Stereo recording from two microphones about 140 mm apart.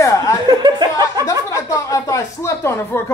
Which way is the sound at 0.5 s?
30° right (ahead or behind).